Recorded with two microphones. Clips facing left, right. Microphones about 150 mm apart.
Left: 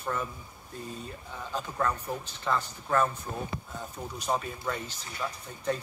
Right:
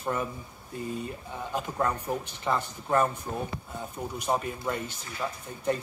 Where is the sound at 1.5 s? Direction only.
15° right (ahead or behind).